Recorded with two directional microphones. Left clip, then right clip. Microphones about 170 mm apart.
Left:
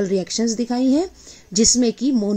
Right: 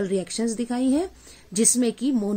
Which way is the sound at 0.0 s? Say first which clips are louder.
Left 5 dB; 50° left (ahead or behind).